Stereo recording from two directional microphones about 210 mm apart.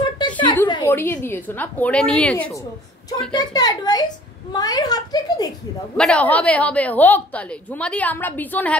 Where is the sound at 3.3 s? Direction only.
20° left (ahead or behind).